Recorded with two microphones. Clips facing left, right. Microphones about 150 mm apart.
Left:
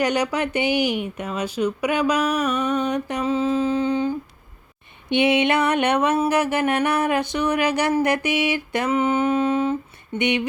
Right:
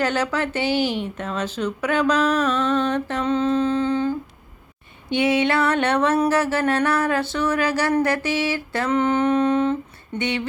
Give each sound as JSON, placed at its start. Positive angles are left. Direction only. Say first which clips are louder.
{"t": 0.0, "sound": "speech", "louder": "left 1 dB", "side_deg": 15}
{"t": 5.0, "sound": "mantra", "louder": "left 1 dB", "side_deg": 20}
{"t": 6.2, "sound": "speech", "louder": "even", "side_deg": 15}
{"t": 8.9, "sound": "a sound", "louder": "right 1 dB", "side_deg": 5}
{"t": 10.2, "sound": "speech", "louder": "left 3 dB", "side_deg": 20}